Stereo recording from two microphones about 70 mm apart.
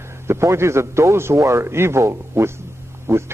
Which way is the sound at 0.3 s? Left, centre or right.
Right.